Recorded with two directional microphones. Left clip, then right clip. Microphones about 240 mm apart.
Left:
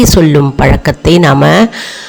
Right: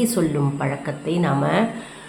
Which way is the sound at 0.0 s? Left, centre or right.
Left.